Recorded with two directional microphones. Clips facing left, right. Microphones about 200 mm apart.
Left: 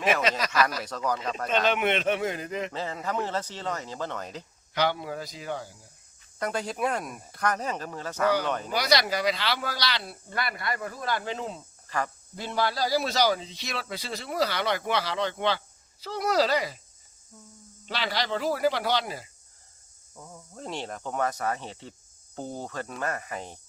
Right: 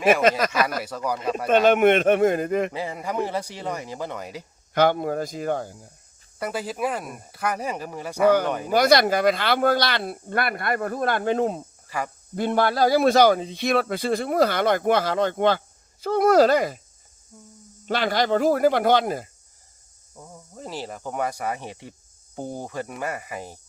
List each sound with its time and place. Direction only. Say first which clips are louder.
0.2 s a man's voice: right 5 dB; 50° right (ahead or behind)
0.9 s speech: right 3 dB; 10° right (ahead or behind)
1.5 s a man's voice: right 9 dB; 50° right (ahead or behind)
2.7 s speech: right 3 dB; 10° right (ahead or behind)
4.7 s a man's voice: right 7 dB; 50° right (ahead or behind)
6.4 s speech: right 2 dB; 5° right (ahead or behind)
8.7 s a man's voice: right 9 dB; 50° right (ahead or behind)
11.9 s speech: right 1 dB; 10° right (ahead or behind)
12.4 s a man's voice: right 8 dB; 55° right (ahead or behind)
17.3 s speech: right 3 dB; 10° right (ahead or behind)
17.8 s a man's voice: right 8 dB; 50° right (ahead or behind)
20.1 s speech: right 2 dB; 10° right (ahead or behind)